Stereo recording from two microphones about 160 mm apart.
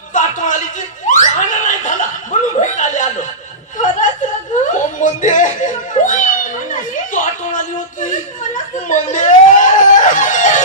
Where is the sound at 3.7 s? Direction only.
50° left (ahead or behind).